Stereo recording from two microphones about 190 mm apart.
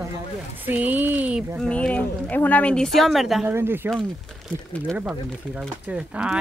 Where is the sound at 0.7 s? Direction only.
10° right (ahead or behind).